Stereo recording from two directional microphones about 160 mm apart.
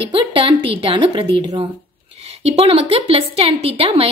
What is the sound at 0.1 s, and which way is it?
A woman's voice, 35° right (ahead or behind).